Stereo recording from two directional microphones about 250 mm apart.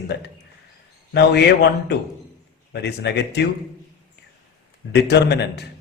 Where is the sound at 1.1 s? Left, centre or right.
Left.